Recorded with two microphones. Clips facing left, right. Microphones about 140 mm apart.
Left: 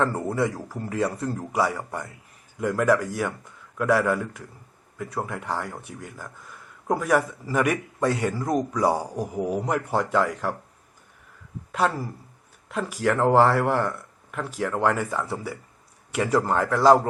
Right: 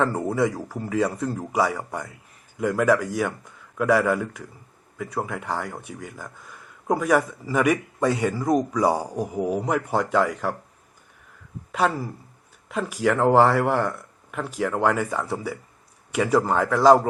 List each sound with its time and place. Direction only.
0.2 s a man's voice: 10° right (ahead or behind)
11.7 s speech: 5° right (ahead or behind)